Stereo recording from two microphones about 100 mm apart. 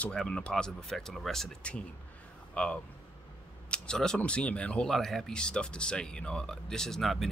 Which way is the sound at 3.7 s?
5° left (ahead or behind).